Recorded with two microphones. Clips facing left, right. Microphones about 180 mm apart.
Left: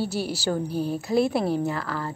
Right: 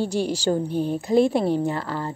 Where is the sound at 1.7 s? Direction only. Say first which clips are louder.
Right 2 dB; 20° right (ahead or behind).